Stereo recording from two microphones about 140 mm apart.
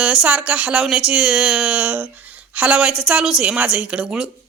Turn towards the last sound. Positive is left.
turn(degrees=-5)  # may be behind; listen again after turning